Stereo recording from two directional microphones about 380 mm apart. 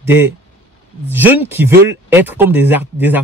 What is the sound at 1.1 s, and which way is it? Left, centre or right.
Speech, centre.